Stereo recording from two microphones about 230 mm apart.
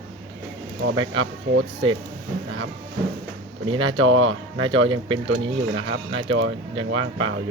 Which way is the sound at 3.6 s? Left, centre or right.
Right.